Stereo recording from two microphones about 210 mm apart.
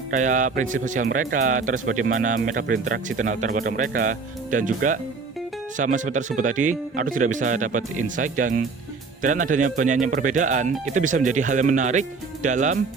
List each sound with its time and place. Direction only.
0.1 s a man's voice: 35° right (ahead or behind)